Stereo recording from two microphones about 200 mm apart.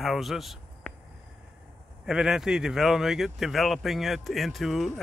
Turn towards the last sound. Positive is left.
turn(degrees=0)  # may be behind; listen again after turning